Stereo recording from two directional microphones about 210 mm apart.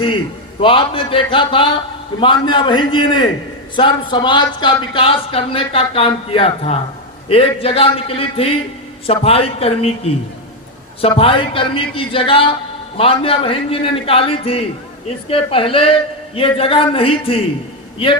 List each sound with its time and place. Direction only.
0.6 s speech: 25° left (ahead or behind)
11.2 s speech: 25° left (ahead or behind)